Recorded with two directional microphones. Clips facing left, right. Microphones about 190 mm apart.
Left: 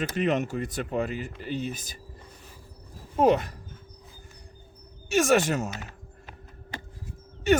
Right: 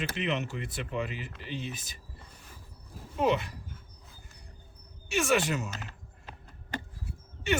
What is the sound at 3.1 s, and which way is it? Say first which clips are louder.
Speech: left 6 dB; 45° left (ahead or behind).